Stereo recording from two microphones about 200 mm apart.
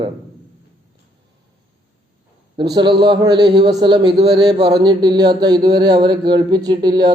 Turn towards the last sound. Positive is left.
turn(degrees=-20)  # may be behind; listen again after turning